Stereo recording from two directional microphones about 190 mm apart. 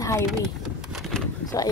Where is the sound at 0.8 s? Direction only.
Centre (ahead or behind).